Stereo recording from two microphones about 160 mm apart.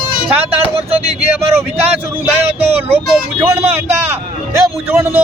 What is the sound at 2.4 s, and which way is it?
Speech, 40° right (ahead or behind).